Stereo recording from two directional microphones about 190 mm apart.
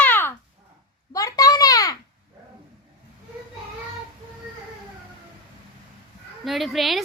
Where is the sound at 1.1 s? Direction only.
20° left (ahead or behind).